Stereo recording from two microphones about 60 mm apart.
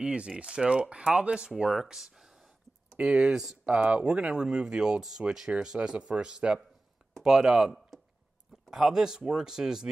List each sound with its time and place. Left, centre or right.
0.0 s speech: centre
3.6 s speech: centre